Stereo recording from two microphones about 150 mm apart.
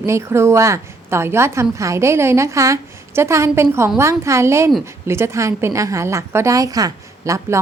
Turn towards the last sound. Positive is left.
turn(degrees=-20)  # may be behind; listen again after turning